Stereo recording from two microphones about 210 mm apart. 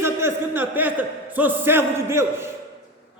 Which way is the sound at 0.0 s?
10° right (ahead or behind).